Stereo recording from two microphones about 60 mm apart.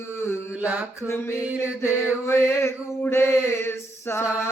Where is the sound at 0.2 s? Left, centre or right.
Left.